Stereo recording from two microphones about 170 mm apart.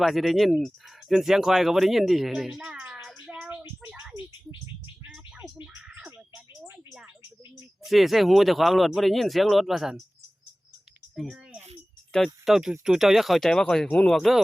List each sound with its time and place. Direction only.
0.0 s speech: centre (ahead or behind)
3.6 s a sound: 15° right (ahead or behind)
6.0 s frog: 5° right (ahead or behind)
7.9 s speech: centre (ahead or behind)
11.1 s a sound: centre (ahead or behind)
12.1 s speech: centre (ahead or behind)